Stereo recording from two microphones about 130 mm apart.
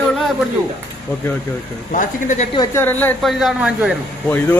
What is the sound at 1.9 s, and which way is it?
Speech, 80° left.